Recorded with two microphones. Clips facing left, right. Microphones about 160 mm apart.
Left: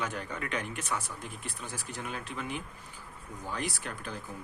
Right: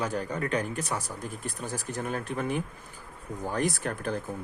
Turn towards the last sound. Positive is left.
turn(degrees=-50)  # may be behind; listen again after turning